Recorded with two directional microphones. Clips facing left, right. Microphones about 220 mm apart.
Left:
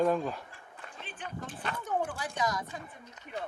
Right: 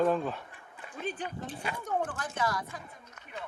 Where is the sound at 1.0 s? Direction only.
35° right (ahead or behind).